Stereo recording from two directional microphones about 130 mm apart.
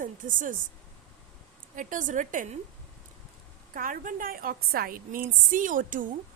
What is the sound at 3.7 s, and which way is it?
A woman's voice, 90° right.